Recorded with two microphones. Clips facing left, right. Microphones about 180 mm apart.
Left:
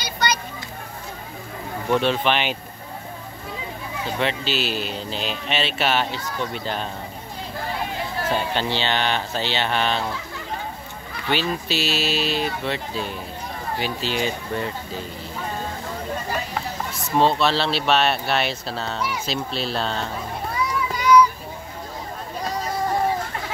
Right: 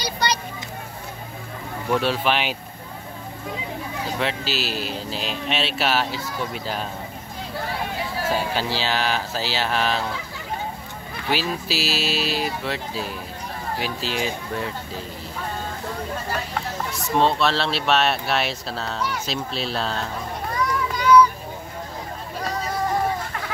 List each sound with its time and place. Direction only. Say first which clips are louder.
0.0 s children playing: even; 35° right (ahead or behind)
1.9 s speech: left 1 dB; 5° right (ahead or behind)
4.2 s speech: left 3 dB; centre (ahead or behind)
8.3 s speech: left 1 dB; 5° right (ahead or behind)
11.2 s speech: left 1 dB; 5° right (ahead or behind)
16.3 s speech: even; centre (ahead or behind)
20.5 s a sound: right 1 dB; 10° left (ahead or behind)